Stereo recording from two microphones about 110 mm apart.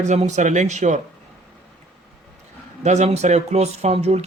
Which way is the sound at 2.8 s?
90° right.